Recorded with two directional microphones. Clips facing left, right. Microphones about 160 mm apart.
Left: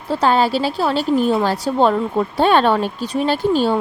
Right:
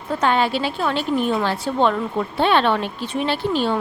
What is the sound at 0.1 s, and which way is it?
A woman's voice, 35° left (ahead or behind).